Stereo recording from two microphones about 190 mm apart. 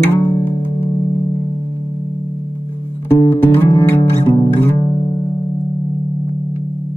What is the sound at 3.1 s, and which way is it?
Music, 10° left (ahead or behind).